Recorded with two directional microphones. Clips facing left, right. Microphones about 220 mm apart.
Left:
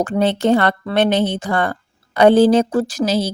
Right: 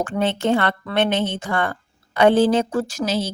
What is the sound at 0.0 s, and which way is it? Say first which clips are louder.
A woman's voice: left 5 dB; 35° left (ahead or behind).